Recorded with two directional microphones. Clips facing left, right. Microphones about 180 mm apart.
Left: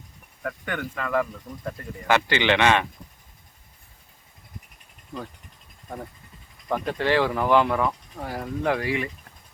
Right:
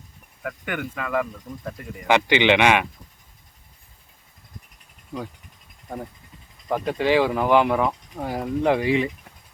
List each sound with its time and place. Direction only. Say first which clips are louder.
0.4 s speech: right 1 dB; 10° right (ahead or behind)
5.1 s speech: right 3 dB; 5° right (ahead or behind)
6.7 s speech: right 3 dB; 10° right (ahead or behind)